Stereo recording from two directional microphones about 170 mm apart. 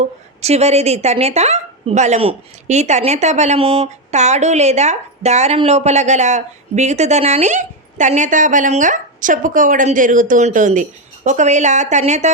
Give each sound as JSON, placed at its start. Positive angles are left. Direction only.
{"t": 0.4, "sound": "speech", "side_deg": -40}